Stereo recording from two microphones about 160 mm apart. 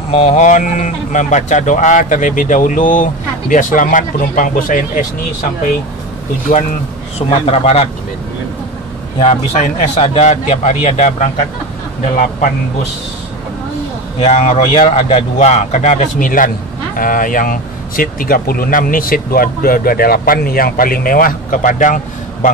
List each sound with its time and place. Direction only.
0.1 s speech: 35° left (ahead or behind)
0.4 s speech: 50° left (ahead or behind)
7.2 s a man's voice: 40° left (ahead or behind)
9.2 s a man's voice: 40° left (ahead or behind)
14.2 s a man's voice: 45° left (ahead or behind)